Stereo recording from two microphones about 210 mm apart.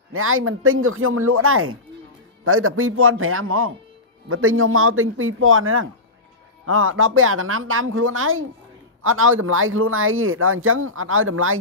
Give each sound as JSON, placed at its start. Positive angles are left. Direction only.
{"t": 0.1, "sound": "speech", "side_deg": -85}